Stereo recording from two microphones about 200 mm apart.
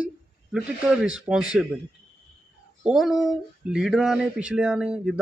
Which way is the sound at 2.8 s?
Centre (ahead or behind).